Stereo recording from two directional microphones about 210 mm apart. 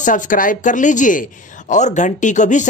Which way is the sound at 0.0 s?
40° left (ahead or behind).